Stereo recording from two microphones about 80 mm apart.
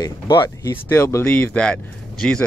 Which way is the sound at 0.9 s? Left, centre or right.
Left.